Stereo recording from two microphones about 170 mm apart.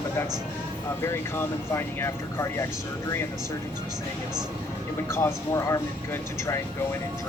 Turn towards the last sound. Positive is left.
turn(degrees=20)  # may be behind; listen again after turning